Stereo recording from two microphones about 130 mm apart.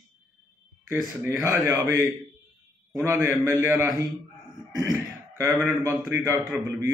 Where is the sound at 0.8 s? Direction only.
15° right (ahead or behind).